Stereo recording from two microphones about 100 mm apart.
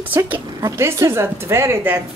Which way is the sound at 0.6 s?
30° right (ahead or behind).